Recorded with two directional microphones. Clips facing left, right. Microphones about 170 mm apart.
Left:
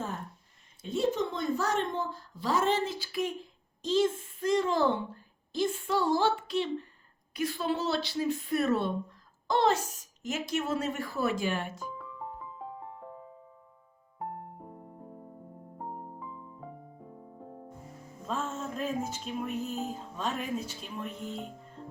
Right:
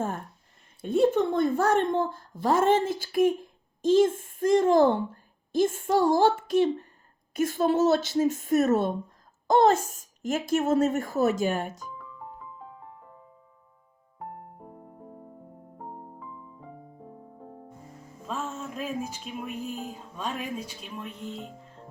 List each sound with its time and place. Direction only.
0.8 s a woman's voice: 55° right (ahead or behind)
18.3 s a sound: 10° right (ahead or behind)
20.1 s speech: 10° right (ahead or behind)
21.0 s speech: centre (ahead or behind)